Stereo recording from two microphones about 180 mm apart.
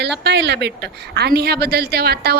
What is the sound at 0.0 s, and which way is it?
A woman's voice, 70° right (ahead or behind).